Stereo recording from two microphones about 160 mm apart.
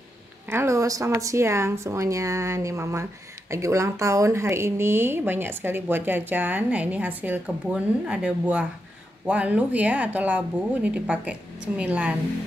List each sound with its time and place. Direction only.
0.5 s speech: 15° right (ahead or behind)